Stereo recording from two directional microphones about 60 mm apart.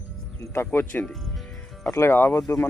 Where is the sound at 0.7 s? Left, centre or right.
Left.